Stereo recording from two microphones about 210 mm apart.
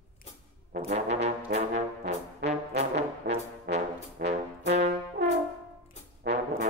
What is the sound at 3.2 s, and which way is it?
Brass instrument, 55° right (ahead or behind).